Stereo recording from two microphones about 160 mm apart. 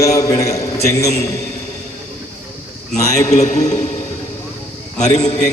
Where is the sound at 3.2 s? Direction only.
50° left (ahead or behind).